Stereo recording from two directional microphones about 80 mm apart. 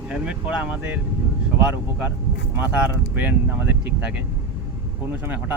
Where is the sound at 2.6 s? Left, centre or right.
Right.